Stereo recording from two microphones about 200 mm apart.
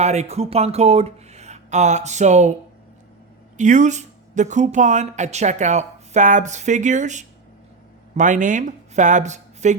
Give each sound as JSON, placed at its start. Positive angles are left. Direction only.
{"t": 0.0, "sound": "speech", "side_deg": -35}
{"t": 3.6, "sound": "speech", "side_deg": -40}